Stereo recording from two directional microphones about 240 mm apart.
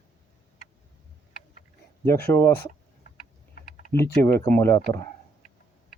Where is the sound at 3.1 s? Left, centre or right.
Left.